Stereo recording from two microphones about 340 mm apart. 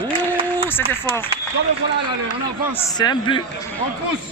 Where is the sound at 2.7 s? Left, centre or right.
Centre.